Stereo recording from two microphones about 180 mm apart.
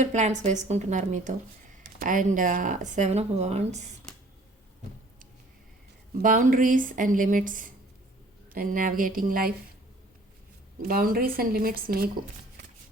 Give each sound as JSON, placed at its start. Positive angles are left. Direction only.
{"t": 0.0, "sound": "a woman's voice", "side_deg": -40}
{"t": 6.2, "sound": "speech", "side_deg": -50}
{"t": 10.8, "sound": "speech", "side_deg": -55}